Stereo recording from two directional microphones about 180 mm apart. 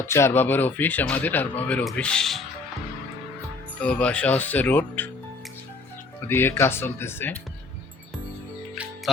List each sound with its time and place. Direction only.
0.1 s speech: 15° left (ahead or behind)
3.8 s speech: 5° left (ahead or behind)
6.2 s speech: 10° left (ahead or behind)